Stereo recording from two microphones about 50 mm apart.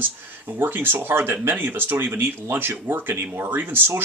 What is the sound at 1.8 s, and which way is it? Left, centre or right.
Speech, right.